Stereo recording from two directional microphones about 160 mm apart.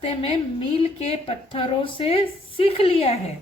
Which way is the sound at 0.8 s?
40° left (ahead or behind).